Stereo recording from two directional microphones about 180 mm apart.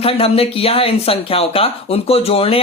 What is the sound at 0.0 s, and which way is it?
Speech, 30° left (ahead or behind).